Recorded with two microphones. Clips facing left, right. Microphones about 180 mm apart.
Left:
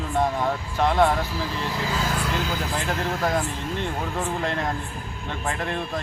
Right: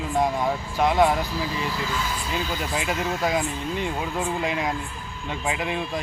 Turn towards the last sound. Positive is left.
turn(degrees=-5)  # may be behind; listen again after turning